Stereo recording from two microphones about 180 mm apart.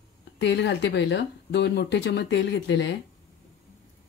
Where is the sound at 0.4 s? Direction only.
75° left (ahead or behind).